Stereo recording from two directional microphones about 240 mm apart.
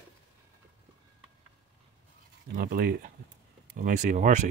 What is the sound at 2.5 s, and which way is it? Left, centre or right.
Speech, right.